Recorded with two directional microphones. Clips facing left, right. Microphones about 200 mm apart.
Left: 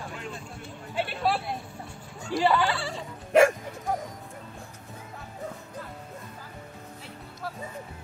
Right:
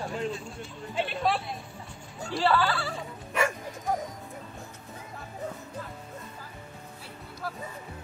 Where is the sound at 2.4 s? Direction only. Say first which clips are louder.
Left 1 dB; 20° left (ahead or behind).